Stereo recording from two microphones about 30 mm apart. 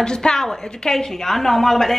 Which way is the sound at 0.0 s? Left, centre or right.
Left.